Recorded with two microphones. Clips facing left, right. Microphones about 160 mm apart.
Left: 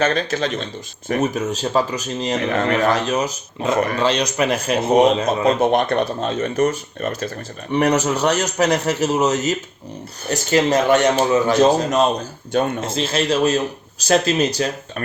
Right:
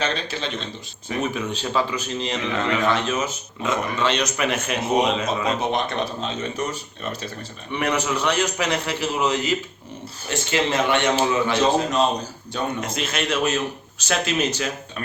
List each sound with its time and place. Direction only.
0.0 s speech: 45° left (ahead or behind)
5.7 s speech: 55° left (ahead or behind)
12.8 s speech: 30° left (ahead or behind)